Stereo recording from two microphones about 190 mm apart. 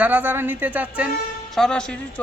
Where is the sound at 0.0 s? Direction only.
10° right (ahead or behind).